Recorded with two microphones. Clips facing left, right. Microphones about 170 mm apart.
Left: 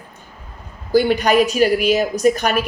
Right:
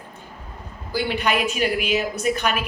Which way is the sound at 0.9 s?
40° left (ahead or behind).